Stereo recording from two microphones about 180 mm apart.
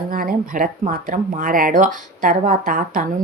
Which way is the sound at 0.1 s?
50° right (ahead or behind).